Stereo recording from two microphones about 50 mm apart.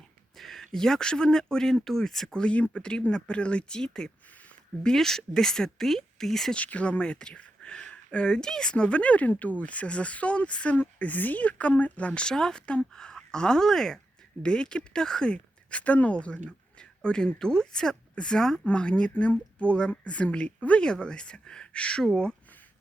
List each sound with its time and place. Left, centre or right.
0.3 s speech: centre
6.5 s speech: left